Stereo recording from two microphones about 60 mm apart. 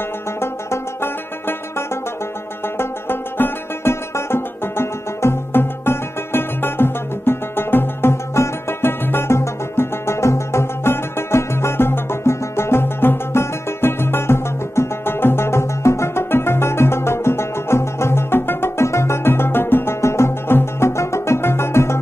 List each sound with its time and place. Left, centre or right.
0.4 s banjo: left
2.8 s music: left